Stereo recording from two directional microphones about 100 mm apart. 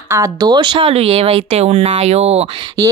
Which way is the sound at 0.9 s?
90° right.